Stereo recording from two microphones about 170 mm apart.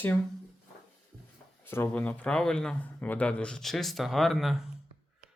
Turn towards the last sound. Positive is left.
turn(degrees=0)  # may be behind; listen again after turning